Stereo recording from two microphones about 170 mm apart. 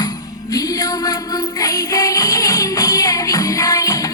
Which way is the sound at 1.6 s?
20° left (ahead or behind).